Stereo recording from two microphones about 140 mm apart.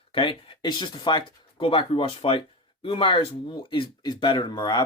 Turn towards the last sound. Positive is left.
turn(degrees=30)  # may be behind; listen again after turning